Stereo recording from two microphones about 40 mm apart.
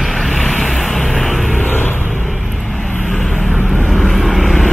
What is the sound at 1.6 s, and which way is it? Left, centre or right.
Vehicle, left.